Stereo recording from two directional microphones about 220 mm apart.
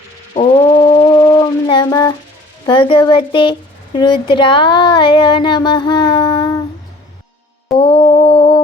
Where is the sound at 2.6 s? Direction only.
20° left (ahead or behind).